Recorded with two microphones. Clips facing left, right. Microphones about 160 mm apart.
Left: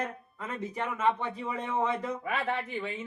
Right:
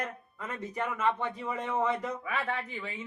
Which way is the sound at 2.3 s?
25° left (ahead or behind).